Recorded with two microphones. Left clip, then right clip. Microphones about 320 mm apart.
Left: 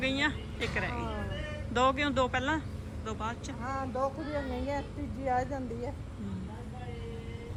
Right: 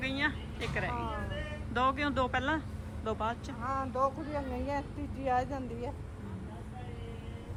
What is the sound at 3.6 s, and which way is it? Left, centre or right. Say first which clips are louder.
Speech: right 2 dB; right.